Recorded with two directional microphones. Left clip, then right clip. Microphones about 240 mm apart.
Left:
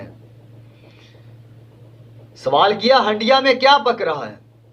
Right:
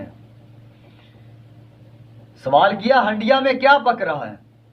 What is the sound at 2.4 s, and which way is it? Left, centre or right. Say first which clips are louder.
A man's voice: even; centre.